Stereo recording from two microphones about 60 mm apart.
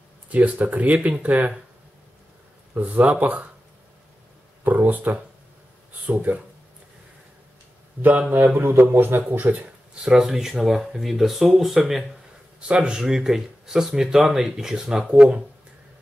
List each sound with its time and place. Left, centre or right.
0.3 s speech: right
2.7 s speech: right
4.6 s speech: right
8.0 s speech: right
8.5 s a man's voice: right
10.0 s speech: centre
12.5 s speech: centre